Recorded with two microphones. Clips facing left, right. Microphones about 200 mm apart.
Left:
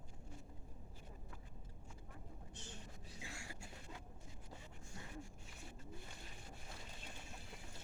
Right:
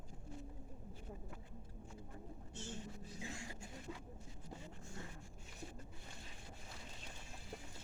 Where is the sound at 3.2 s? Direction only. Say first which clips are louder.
Right 5 dB; 20° right (ahead or behind).